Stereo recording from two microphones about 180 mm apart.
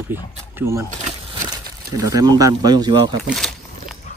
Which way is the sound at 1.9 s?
20° right (ahead or behind).